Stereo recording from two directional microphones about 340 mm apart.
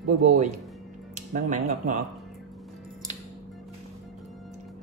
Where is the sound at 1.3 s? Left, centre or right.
Right.